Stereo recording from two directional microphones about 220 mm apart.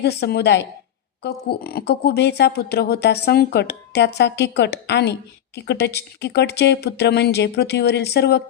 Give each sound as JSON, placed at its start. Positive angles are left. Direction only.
{"t": 0.0, "sound": "speech", "side_deg": 50}